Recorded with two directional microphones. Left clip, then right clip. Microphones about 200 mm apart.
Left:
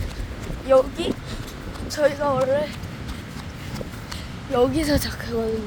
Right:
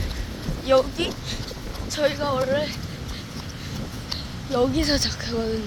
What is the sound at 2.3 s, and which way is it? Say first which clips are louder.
Speech: left 2 dB; 10° left (ahead or behind).